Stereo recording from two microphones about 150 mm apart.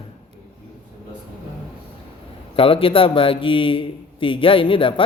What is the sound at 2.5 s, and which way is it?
A man's voice, 35° left (ahead or behind).